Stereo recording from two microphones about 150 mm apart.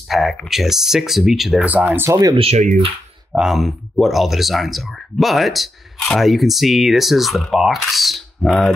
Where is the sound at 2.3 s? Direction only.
45° right (ahead or behind).